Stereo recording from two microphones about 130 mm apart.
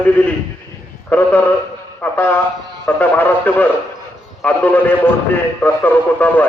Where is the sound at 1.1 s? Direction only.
15° left (ahead or behind).